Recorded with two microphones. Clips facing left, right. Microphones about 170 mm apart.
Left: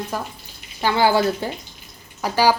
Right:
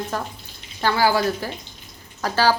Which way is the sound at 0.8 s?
25° left (ahead or behind).